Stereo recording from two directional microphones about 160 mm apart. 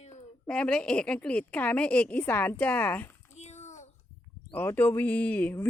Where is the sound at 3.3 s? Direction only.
45° left (ahead or behind).